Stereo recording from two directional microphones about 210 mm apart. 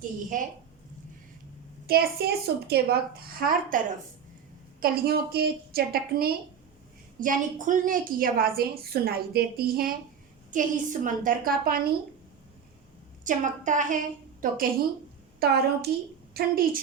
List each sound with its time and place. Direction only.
0.3 s a woman's voice: 40° right (ahead or behind)
1.9 s a woman's voice: 45° right (ahead or behind)
13.2 s a woman's voice: 35° right (ahead or behind)